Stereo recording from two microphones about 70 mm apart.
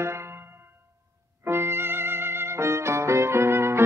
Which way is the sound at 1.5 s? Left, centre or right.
Right.